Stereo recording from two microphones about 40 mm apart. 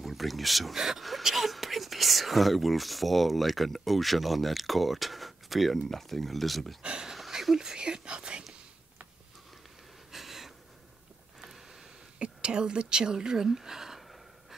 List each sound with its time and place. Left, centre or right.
0.0 s speech: centre
6.8 s speech: right
7.2 s whispering: centre; by 8.5 s right
10.1 s a sound: centre
12.2 s speech: right